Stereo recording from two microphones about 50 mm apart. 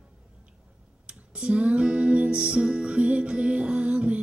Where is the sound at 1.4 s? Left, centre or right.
Right.